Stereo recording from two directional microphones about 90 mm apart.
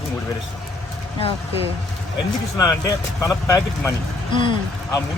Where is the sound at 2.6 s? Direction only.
40° left (ahead or behind).